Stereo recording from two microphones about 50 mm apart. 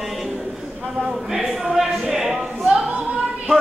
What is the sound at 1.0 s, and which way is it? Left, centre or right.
Speech, centre.